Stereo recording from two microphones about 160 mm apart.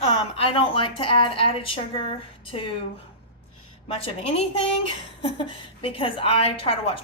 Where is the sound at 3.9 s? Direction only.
40° left (ahead or behind).